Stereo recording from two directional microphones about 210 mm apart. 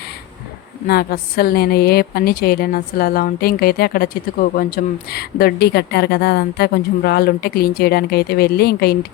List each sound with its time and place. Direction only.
0.9 s a woman's voice: 45° left (ahead or behind)